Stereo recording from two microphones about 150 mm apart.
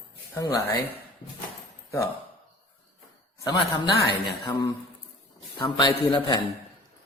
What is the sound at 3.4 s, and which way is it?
A man's voice, 30° left (ahead or behind).